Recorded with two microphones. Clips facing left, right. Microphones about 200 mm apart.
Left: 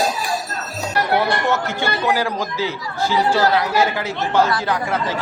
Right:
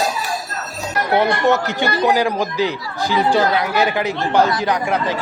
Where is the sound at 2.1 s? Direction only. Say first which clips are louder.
Right 3 dB; 15° right (ahead or behind).